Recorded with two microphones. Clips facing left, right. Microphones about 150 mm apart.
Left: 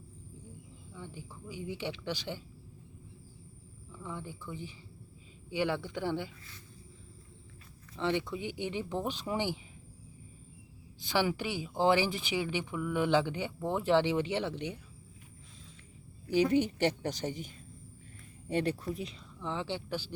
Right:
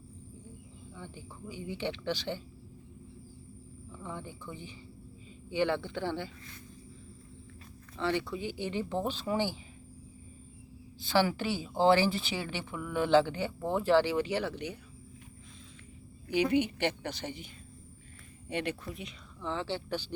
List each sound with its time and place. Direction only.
1.0 s speech: 10° left (ahead or behind)
4.0 s speech: 5° left (ahead or behind)
7.9 s speech: 20° left (ahead or behind)
11.0 s speech: 15° left (ahead or behind)
16.3 s a woman's voice: 40° left (ahead or behind)
19.4 s speech: 15° left (ahead or behind)